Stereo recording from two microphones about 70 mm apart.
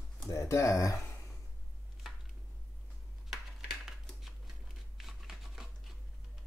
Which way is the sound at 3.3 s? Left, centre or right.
Centre.